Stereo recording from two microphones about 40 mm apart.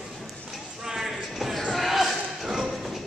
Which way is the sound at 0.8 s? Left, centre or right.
Centre.